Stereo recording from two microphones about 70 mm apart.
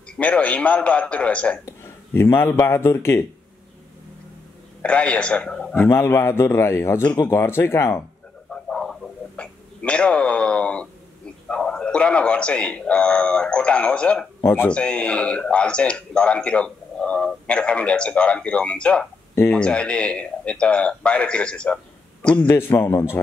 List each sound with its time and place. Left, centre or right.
0.2 s speech: centre
1.7 s a sound: left
2.6 s a man's voice: left
4.8 s speech: centre
5.8 s a man's voice: left
8.5 s a sound: centre
9.4 s a man's voice: centre
22.5 s a man's voice: left